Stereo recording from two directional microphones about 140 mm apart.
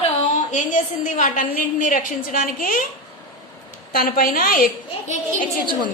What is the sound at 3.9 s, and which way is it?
Speech, 90° left.